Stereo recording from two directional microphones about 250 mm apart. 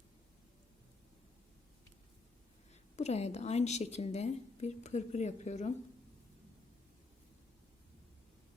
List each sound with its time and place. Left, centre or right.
2.9 s a woman's voice: left